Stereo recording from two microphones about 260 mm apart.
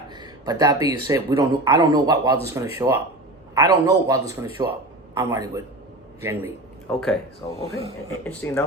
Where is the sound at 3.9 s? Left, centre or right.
Centre.